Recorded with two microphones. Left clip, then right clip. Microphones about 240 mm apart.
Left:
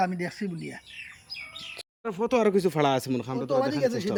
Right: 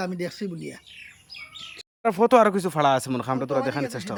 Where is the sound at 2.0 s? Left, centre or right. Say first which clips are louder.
Right 8 dB; centre.